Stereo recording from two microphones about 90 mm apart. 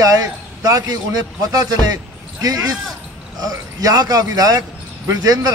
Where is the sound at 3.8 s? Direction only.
45° right (ahead or behind).